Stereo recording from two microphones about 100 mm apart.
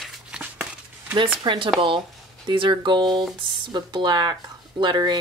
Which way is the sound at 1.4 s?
50° right (ahead or behind).